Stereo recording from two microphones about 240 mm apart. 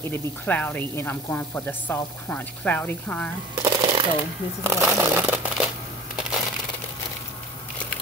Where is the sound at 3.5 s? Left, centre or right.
Centre.